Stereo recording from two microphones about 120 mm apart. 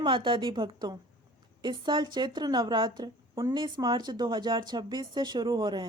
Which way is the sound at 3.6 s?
40° right (ahead or behind).